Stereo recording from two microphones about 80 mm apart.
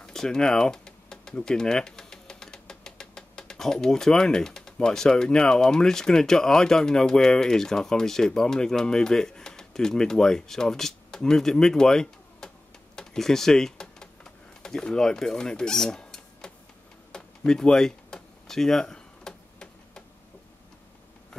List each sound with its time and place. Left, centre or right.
0.0 s speech: centre
12.9 s typing: centre
17.1 s a sound: centre